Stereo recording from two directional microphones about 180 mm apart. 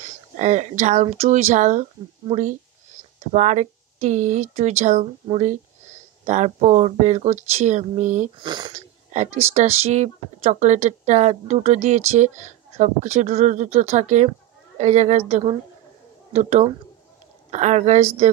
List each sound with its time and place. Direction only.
0.4 s speech: 40° right (ahead or behind)
3.3 s speech: 40° right (ahead or behind)
8.4 s speech: 25° right (ahead or behind)
8.7 s speech: 40° right (ahead or behind)